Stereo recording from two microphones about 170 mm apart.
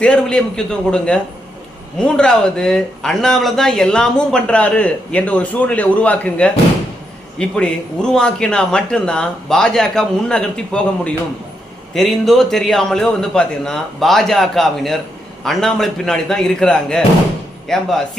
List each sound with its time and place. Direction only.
0.0 s speech: 5° left (ahead or behind)